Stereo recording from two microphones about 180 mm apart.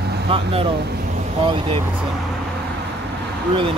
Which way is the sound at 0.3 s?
30° right (ahead or behind).